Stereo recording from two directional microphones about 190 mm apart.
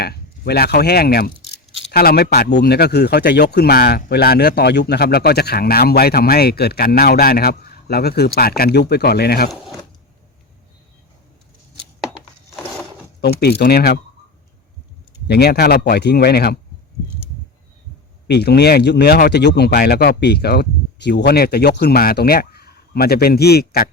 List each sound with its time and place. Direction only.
0.0 s speech: 55° left (ahead or behind)
13.2 s speech: 60° left (ahead or behind)
15.3 s speech: 60° left (ahead or behind)
18.3 s speech: 60° left (ahead or behind)